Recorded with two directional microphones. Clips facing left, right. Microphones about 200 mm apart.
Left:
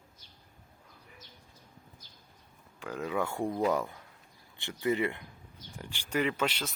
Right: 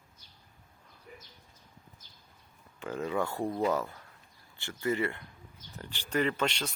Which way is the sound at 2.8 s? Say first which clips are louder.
Right 1 dB; centre (ahead or behind).